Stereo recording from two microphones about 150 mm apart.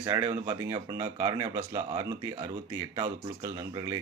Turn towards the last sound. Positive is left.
turn(degrees=-25)  # may be behind; listen again after turning